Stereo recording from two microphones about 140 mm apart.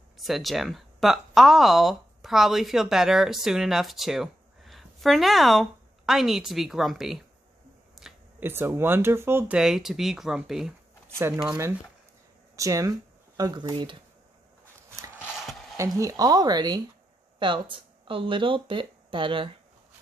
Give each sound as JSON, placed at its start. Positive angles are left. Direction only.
{"t": 0.2, "sound": "speech", "side_deg": 0}
{"t": 8.0, "sound": "a sound", "side_deg": 0}
{"t": 8.4, "sound": "speech", "side_deg": -15}
{"t": 9.6, "sound": "speech", "side_deg": -5}
{"t": 11.4, "sound": "speech", "side_deg": -20}
{"t": 16.0, "sound": "speech", "side_deg": -25}